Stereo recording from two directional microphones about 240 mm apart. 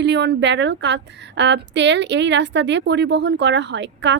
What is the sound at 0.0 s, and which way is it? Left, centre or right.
Speech, right.